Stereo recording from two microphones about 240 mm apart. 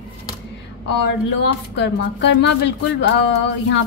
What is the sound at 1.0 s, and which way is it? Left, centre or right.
Speech, left.